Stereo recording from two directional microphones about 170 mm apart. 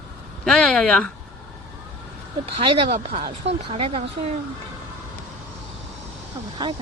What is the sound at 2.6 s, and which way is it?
Speech, 30° right (ahead or behind).